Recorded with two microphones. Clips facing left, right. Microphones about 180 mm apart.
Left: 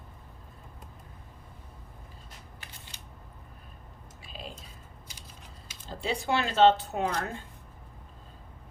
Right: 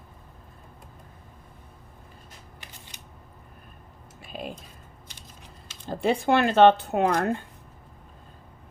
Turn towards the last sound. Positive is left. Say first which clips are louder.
# right 8 dB
turn(degrees=-60)  # may be behind; listen again after turning